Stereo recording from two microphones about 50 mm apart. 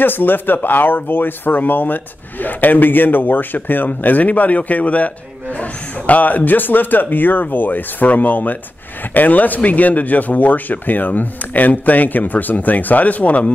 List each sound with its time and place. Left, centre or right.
0.0 s speech: left